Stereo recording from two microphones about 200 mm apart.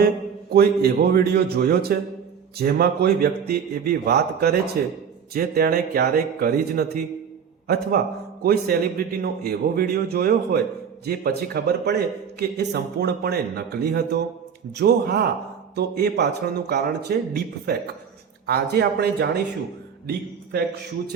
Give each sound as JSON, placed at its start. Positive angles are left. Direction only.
{"t": 0.5, "sound": "a man's voice", "side_deg": -50}